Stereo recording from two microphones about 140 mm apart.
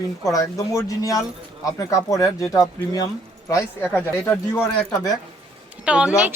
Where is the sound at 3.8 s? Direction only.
10° left (ahead or behind).